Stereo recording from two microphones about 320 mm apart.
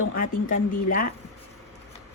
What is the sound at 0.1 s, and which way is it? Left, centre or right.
Speech, left.